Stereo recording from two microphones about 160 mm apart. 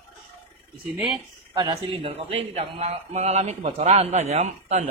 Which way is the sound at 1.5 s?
30° right (ahead or behind).